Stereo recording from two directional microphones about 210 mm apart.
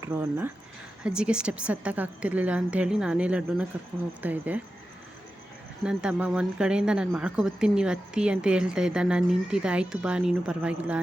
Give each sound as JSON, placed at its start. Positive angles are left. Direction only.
{"t": 0.0, "sound": "speech", "side_deg": -10}
{"t": 5.8, "sound": "speech", "side_deg": -5}